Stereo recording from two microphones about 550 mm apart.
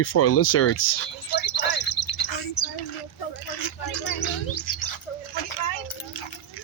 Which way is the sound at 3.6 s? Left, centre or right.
Left.